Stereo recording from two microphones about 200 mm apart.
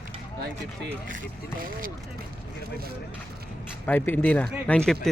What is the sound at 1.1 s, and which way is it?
Speech, 45° right (ahead or behind).